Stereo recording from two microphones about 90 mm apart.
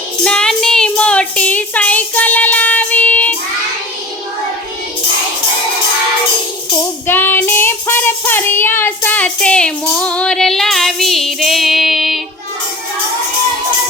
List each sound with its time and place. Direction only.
0.3 s a sound: 10° left (ahead or behind)
7.1 s child singing: 20° left (ahead or behind)
9.8 s music: 10° left (ahead or behind)